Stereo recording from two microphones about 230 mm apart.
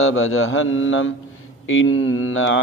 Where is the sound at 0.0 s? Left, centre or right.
Left.